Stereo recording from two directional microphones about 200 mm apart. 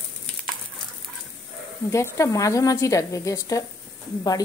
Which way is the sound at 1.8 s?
15° left (ahead or behind).